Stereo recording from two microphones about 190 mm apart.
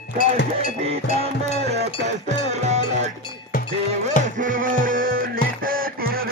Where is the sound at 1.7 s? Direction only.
60° right (ahead or behind).